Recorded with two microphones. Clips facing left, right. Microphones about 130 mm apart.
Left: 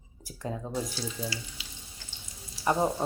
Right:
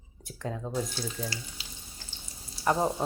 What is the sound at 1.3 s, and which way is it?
Water tap, 40° right (ahead or behind).